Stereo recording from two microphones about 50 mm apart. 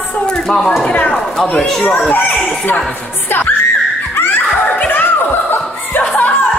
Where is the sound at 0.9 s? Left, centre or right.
Left.